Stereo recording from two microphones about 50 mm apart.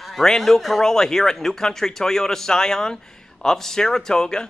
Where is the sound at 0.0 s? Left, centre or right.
Centre.